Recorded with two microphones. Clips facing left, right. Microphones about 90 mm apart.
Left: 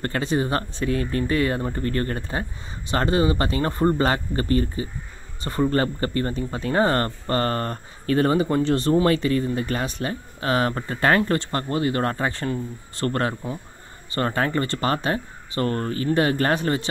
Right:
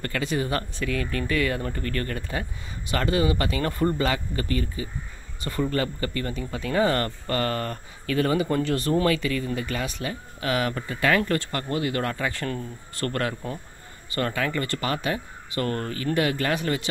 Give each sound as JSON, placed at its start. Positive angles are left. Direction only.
{"t": 0.0, "sound": "speech", "side_deg": 30}